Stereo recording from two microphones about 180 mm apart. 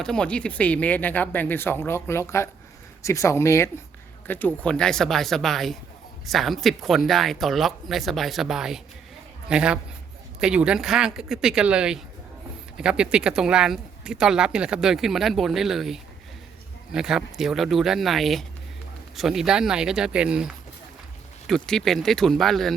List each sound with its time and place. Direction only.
0.0 s speech: 5° left (ahead or behind)